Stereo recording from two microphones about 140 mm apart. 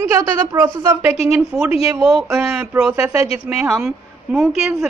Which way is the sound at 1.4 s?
5° right (ahead or behind).